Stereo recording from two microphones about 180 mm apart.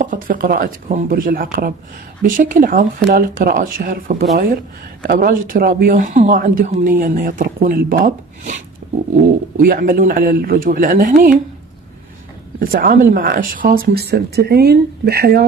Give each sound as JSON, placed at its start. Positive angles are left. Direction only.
{"t": 0.0, "sound": "speech", "side_deg": -50}
{"t": 9.6, "sound": "speech", "side_deg": -50}
{"t": 12.5, "sound": "speech", "side_deg": -55}